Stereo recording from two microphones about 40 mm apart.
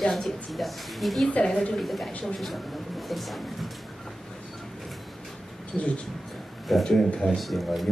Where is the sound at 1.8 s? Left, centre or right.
Centre.